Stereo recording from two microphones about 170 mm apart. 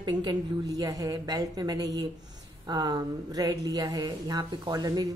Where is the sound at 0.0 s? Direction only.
25° right (ahead or behind).